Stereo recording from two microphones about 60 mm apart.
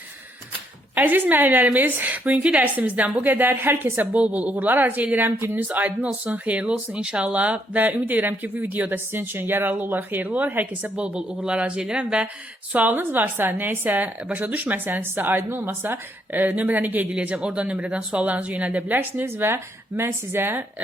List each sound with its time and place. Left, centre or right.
0.9 s speech: right
4.2 s speech: right
5.6 s speech: right
10.9 s speech: centre
12.7 s speech: right
17.1 s speech: centre
19.2 s speech: right